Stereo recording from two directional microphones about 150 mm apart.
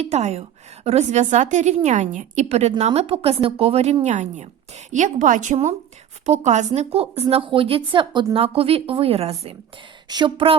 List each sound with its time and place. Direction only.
0.0 s a woman's voice: 50° right (ahead or behind)
10.1 s a woman's voice: 30° right (ahead or behind)